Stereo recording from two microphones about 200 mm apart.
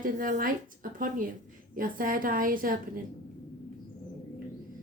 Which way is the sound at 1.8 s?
45° right (ahead or behind).